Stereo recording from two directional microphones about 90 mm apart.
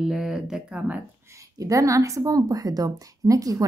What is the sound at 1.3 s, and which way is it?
A woman's voice, 40° right (ahead or behind).